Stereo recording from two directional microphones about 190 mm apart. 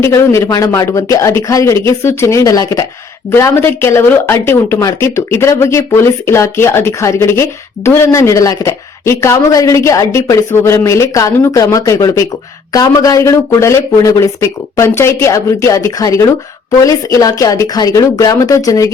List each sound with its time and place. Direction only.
0.0 s speech: 15° left (ahead or behind)